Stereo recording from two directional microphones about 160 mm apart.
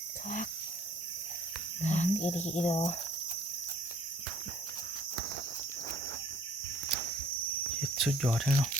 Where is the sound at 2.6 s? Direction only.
45° left (ahead or behind).